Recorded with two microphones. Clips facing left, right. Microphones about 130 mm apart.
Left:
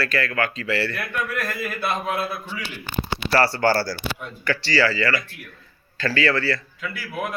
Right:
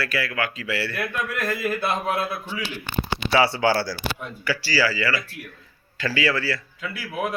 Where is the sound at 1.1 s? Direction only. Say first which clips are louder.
Even; 20° right (ahead or behind).